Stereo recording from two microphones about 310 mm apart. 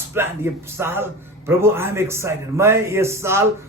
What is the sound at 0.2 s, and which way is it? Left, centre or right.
A man's voice, centre.